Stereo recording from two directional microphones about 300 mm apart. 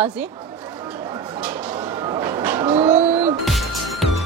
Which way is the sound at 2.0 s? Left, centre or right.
Centre.